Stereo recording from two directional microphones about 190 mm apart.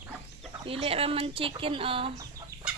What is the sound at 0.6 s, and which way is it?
Speech, 30° right (ahead or behind).